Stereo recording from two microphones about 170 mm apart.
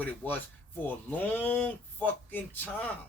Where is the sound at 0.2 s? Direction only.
10° left (ahead or behind).